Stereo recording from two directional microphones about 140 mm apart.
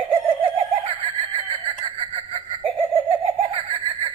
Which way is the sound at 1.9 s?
35° right (ahead or behind).